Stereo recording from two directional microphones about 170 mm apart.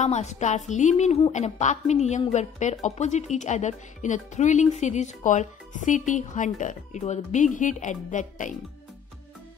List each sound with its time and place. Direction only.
0.0 s a woman's voice: 40° left (ahead or behind)